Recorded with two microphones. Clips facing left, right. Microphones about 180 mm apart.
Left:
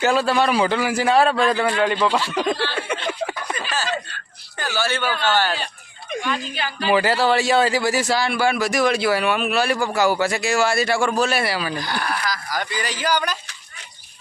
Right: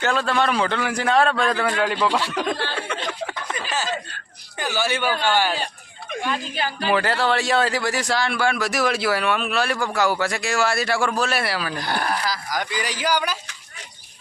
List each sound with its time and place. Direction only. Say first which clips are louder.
0.0 s a man's voice: left 3 dB; 10° left (ahead or behind)
3.5 s snicker: left 1 dB; 20° right (ahead or behind)
4.6 s a man's voice: even; 15° right (ahead or behind)
6.9 s a man's voice: left 4 dB; 5° left (ahead or behind)
11.8 s speech: right 1 dB; 55° right (ahead or behind)
12.0 s speech: right 1 dB; 30° right (ahead or behind)
12.5 s a man's voice: even; 10° right (ahead or behind)